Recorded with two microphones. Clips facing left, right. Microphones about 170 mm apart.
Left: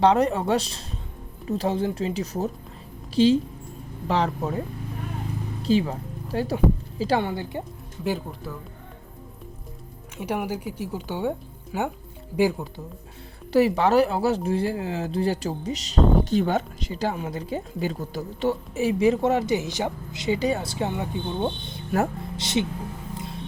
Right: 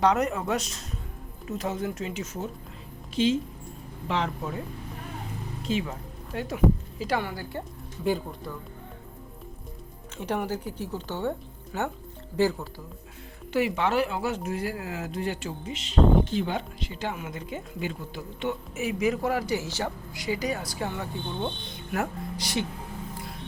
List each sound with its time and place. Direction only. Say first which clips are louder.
0.0 s speech: left 4 dB; 30° left (ahead or behind)
5.6 s a woman's voice: left 7 dB; 35° left (ahead or behind)
8.0 s speech: even; centre (ahead or behind)
10.2 s speech: left 2 dB; 10° left (ahead or behind)
13.5 s speech: left 6 dB; 35° left (ahead or behind); by 21.5 s 20° left (ahead or behind)
21.9 s speech: left 5 dB; 30° left (ahead or behind)
23.1 s music: left 4 dB; 25° left (ahead or behind)